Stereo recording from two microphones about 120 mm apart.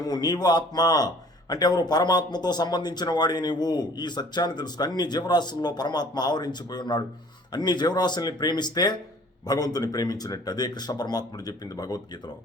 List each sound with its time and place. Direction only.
0.0 s a man's voice: 35° left (ahead or behind)